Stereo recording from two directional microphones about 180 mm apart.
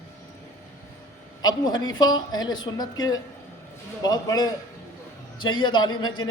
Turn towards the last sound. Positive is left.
turn(degrees=25)  # may be behind; listen again after turning